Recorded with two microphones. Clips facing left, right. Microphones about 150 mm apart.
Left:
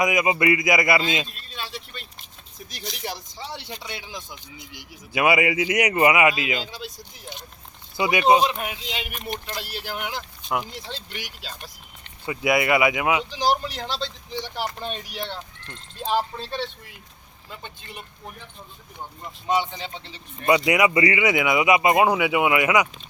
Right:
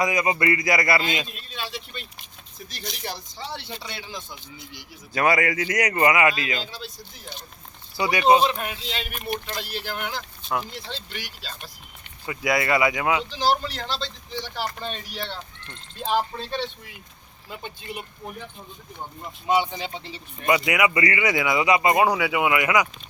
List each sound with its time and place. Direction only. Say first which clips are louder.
0.0 s speech: left 2 dB; 20° left (ahead or behind)
1.3 s vehicle: right 2 dB; centre (ahead or behind)
2.8 s speech: left 1 dB; centre (ahead or behind)
3.3 s speech: right 1 dB; 10° left (ahead or behind)
17.5 s speech: right 4 dB; 15° right (ahead or behind)
19.2 s speech: right 1 dB; 5° right (ahead or behind)
20.7 s speech: left 3 dB; 20° left (ahead or behind)